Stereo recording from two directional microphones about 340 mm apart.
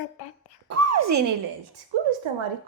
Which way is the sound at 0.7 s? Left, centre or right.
Right.